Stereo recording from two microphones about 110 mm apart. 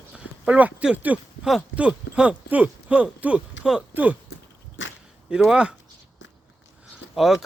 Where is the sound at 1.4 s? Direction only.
5° right (ahead or behind).